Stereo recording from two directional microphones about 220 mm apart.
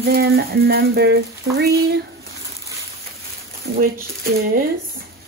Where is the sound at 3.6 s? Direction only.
45° right (ahead or behind).